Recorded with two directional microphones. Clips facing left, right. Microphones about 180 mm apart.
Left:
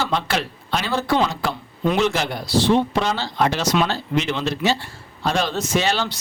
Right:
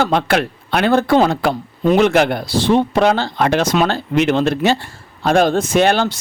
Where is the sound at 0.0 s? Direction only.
60° right (ahead or behind).